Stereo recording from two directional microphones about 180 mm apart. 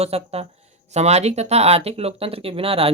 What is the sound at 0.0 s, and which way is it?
Speech, 35° right (ahead or behind).